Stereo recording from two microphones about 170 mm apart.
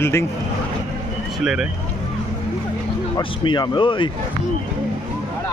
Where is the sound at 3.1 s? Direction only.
25° left (ahead or behind).